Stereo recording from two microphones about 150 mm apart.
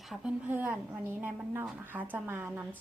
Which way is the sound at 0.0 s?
5° right (ahead or behind).